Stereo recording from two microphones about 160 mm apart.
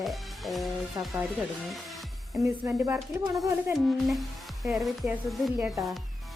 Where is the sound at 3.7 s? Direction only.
Centre (ahead or behind).